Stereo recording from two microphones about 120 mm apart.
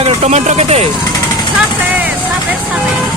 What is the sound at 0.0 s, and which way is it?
Speech, 65° right (ahead or behind).